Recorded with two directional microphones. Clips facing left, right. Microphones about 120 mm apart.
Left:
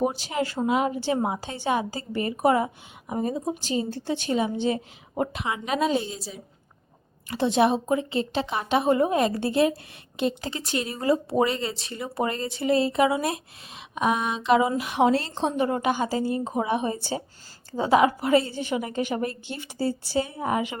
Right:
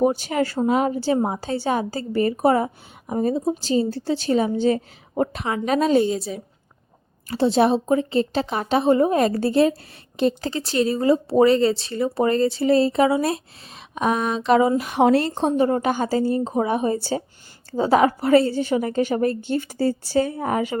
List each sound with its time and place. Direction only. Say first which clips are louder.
0.0 s speech: right 6 dB; 50° right (ahead or behind)
7.3 s a woman's voice: right 4 dB; 35° right (ahead or behind)